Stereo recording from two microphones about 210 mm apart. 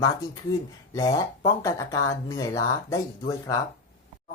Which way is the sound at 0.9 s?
15° left (ahead or behind).